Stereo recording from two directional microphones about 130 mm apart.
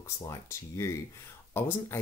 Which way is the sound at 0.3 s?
20° left (ahead or behind).